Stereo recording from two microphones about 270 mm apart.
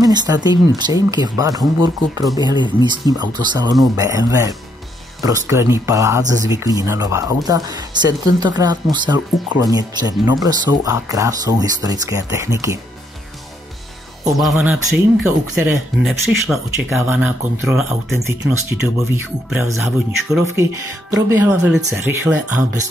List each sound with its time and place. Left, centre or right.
0.0 s speech: centre
14.4 s speech: centre